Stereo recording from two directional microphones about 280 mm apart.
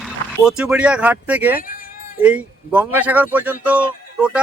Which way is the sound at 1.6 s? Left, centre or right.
Left.